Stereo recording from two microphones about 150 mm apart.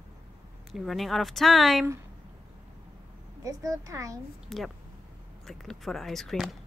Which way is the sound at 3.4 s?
20° right (ahead or behind).